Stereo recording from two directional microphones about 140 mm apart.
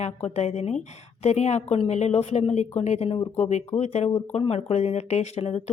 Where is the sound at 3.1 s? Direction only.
30° left (ahead or behind).